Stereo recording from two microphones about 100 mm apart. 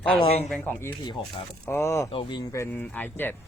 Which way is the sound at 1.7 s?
25° left (ahead or behind).